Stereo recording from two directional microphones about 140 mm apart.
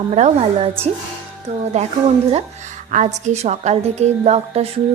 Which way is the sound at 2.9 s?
55° right (ahead or behind).